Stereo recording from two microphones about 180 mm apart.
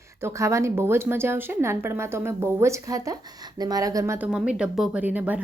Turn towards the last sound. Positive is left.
turn(degrees=-10)  # may be behind; listen again after turning